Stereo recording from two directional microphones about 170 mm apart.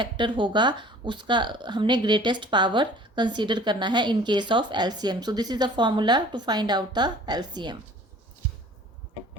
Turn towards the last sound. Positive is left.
turn(degrees=-25)  # may be behind; listen again after turning